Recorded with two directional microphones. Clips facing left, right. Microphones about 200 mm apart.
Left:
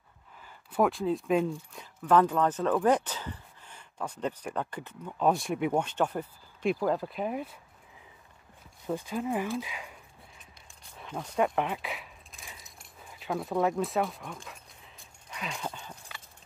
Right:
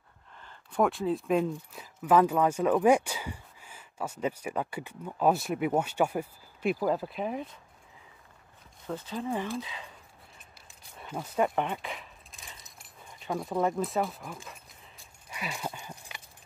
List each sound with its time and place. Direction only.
0.4 s speech: 5° left (ahead or behind)
8.8 s speech: 10° left (ahead or behind)
11.0 s speech: 5° right (ahead or behind)
15.2 s a sound: 5° right (ahead or behind)